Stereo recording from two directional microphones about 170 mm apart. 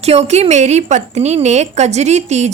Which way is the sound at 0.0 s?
40° right (ahead or behind).